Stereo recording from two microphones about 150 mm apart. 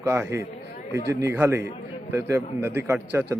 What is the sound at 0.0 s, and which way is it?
A man's voice, 20° right (ahead or behind).